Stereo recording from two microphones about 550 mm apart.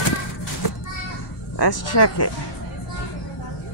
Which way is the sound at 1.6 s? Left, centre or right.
Left.